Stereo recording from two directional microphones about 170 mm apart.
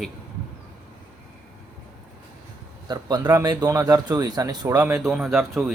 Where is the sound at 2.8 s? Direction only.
25° right (ahead or behind).